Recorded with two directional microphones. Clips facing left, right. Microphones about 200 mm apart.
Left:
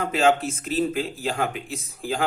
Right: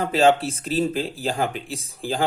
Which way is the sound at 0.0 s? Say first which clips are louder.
Right 3 dB; 35° right (ahead or behind).